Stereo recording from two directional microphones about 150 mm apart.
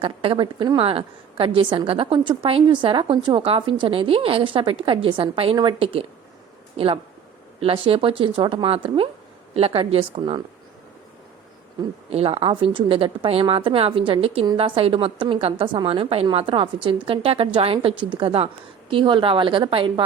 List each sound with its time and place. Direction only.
0.0 s a woman's voice: 35° right (ahead or behind)
12.1 s a woman's voice: 40° right (ahead or behind)